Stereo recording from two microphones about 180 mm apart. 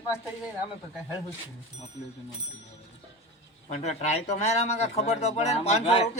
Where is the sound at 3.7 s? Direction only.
40° left (ahead or behind).